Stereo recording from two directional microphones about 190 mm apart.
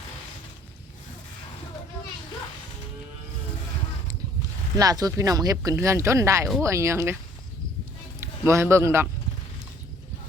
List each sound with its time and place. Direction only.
4.8 s speech: 20° right (ahead or behind)
8.2 s music: 15° right (ahead or behind)
8.7 s speech: 15° right (ahead or behind)